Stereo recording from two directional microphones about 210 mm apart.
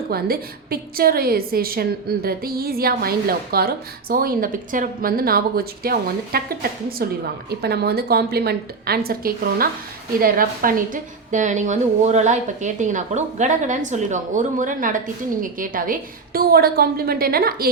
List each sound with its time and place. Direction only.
0.1 s a woman's voice: 45° right (ahead or behind)